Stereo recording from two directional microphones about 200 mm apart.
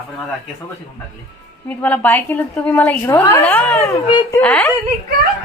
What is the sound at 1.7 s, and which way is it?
A woman's voice, 10° left (ahead or behind).